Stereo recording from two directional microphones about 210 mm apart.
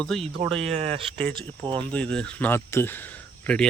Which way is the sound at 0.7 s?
30° right (ahead or behind).